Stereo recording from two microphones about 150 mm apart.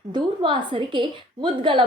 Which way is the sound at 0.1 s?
35° right (ahead or behind).